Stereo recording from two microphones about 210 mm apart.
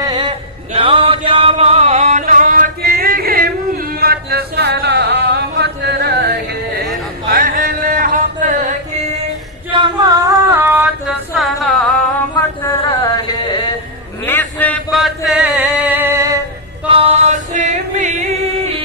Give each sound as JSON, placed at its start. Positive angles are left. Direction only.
{"t": 0.0, "sound": "chant", "side_deg": -25}
{"t": 9.7, "sound": "female singing", "side_deg": -20}
{"t": 13.0, "sound": "a sound", "side_deg": 20}
{"t": 14.2, "sound": "chant", "side_deg": 10}
{"t": 16.8, "sound": "chant", "side_deg": -25}